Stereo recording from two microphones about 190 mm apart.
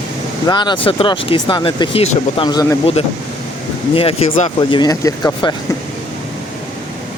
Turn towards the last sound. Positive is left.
turn(degrees=20)  # may be behind; listen again after turning